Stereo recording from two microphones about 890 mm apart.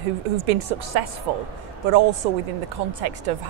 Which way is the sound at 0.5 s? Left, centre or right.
Right.